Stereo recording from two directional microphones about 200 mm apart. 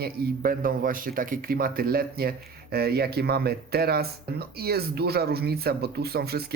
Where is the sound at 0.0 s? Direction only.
45° right (ahead or behind).